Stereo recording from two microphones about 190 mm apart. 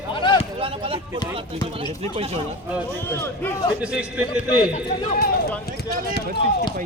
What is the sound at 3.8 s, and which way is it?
Speech, 5° right (ahead or behind).